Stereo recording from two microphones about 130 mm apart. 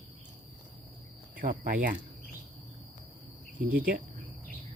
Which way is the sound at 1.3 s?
90° right.